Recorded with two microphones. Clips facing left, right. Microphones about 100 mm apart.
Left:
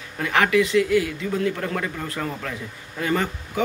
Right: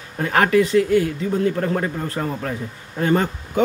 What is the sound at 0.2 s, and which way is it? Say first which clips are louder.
Speech: right 3 dB; 40° right (ahead or behind).